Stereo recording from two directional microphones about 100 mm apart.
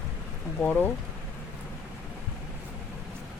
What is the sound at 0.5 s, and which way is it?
Speech, 15° left (ahead or behind).